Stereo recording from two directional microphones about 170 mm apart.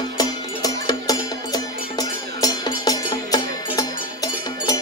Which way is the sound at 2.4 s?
20° left (ahead or behind).